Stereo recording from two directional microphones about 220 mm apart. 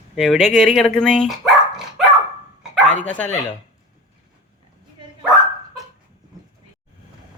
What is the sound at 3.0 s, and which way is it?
Speech, 5° left (ahead or behind).